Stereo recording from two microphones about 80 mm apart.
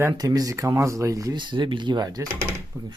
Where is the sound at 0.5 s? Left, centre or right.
Right.